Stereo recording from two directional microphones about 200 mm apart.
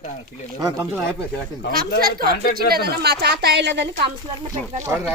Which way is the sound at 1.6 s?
60° left (ahead or behind).